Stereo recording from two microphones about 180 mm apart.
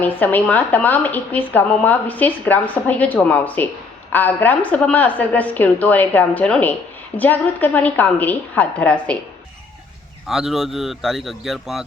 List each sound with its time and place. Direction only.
0.0 s a woman's voice: 10° left (ahead or behind)
10.2 s a man's voice: centre (ahead or behind)